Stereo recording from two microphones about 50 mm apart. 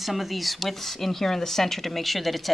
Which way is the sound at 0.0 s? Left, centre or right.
Centre.